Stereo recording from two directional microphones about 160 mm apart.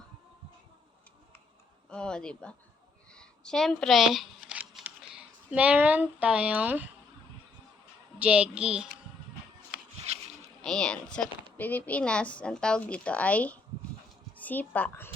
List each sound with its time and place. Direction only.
1.9 s speech: 5° left (ahead or behind)
3.1 s shuffling cards: 5° left (ahead or behind)
8.2 s speech: 5° right (ahead or behind)
10.1 s a sound: 45° right (ahead or behind)
10.6 s a woman's voice: 5° left (ahead or behind)